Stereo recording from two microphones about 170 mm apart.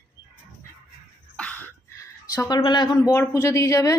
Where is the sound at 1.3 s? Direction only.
10° left (ahead or behind).